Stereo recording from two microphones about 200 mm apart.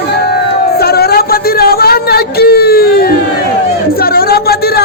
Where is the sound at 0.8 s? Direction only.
50° left (ahead or behind).